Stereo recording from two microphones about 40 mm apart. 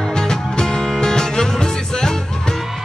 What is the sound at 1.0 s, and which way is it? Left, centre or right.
Music, centre.